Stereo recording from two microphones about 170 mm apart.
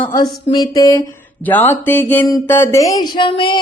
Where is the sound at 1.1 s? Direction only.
10° left (ahead or behind).